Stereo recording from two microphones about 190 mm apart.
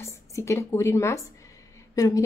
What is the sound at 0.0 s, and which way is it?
A woman's voice, 15° left (ahead or behind).